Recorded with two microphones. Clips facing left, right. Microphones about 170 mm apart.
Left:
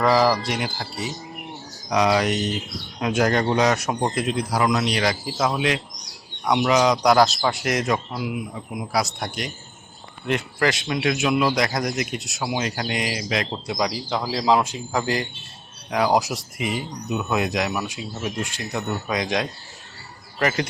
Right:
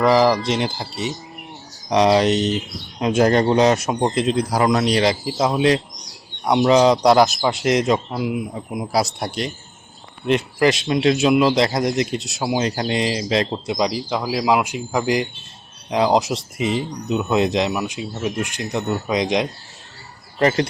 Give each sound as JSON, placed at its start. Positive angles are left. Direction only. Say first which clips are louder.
{"t": 0.0, "sound": "speech", "louder": "right 3 dB", "side_deg": -20}
{"t": 4.5, "sound": "speech", "louder": "right 3 dB", "side_deg": -35}
{"t": 5.2, "sound": "speech", "louder": "right 5 dB", "side_deg": -20}
{"t": 10.2, "sound": "speech", "louder": "right 5 dB", "side_deg": -20}
{"t": 20.4, "sound": "speech", "louder": "right 5 dB", "side_deg": -30}